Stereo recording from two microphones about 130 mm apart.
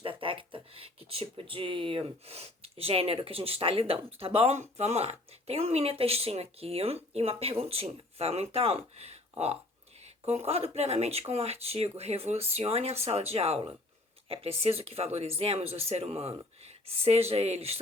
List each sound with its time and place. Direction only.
0.0 s speech: 45° right (ahead or behind)